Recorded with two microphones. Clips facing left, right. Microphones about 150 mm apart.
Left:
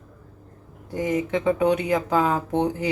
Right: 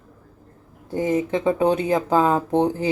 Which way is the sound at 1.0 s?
30° right (ahead or behind).